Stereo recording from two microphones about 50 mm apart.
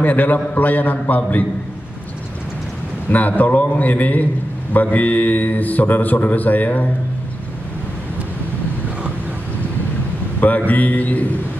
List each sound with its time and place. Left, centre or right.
0.0 s speech: left
3.1 s speech: left
10.7 s speech: left